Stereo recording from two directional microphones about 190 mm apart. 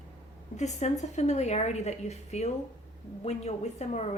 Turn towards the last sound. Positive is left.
turn(degrees=35)  # may be behind; listen again after turning